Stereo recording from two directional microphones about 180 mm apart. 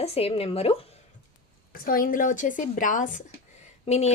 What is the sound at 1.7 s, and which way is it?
A woman's voice, 55° left (ahead or behind).